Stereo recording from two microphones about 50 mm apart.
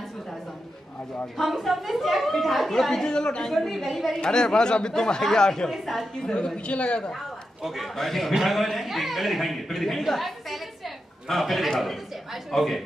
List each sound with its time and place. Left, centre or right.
1.2 s speech: centre
3.5 s speech: centre
4.1 s speech: centre
5.7 s speech: centre
6.2 s a woman's voice: centre
7.6 s speech: centre